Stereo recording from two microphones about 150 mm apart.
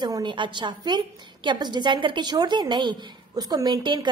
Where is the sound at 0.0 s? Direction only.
30° right (ahead or behind).